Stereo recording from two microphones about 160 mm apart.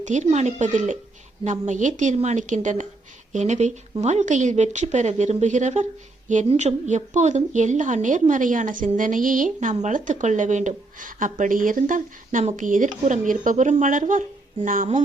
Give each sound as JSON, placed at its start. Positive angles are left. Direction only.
{"t": 0.0, "sound": "a woman's voice", "side_deg": -50}